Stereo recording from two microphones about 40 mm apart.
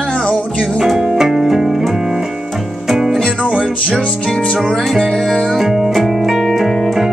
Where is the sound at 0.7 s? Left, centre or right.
Centre.